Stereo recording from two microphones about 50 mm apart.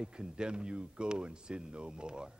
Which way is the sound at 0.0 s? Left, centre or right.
Centre.